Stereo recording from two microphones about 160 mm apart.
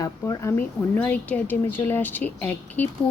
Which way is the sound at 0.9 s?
10° left (ahead or behind).